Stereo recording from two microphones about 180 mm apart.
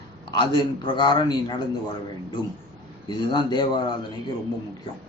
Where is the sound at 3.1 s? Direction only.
25° left (ahead or behind).